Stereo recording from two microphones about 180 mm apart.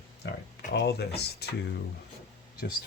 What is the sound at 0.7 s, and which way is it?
Speech, 65° left (ahead or behind).